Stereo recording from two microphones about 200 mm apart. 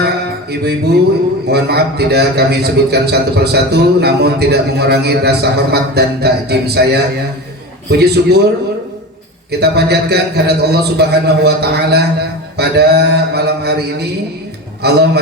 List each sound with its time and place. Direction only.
0.5 s a man's voice: 55° right (ahead or behind)
7.9 s a man's voice: 55° right (ahead or behind)
9.5 s a man's voice: 55° right (ahead or behind)
12.5 s a sound: 55° right (ahead or behind)
14.8 s a man's voice: 55° right (ahead or behind)